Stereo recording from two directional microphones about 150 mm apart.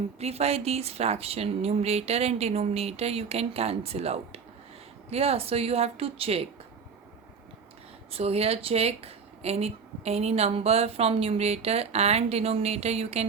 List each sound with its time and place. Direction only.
0.2 s a woman's voice: 45° right (ahead or behind)
8.1 s speech: 40° right (ahead or behind)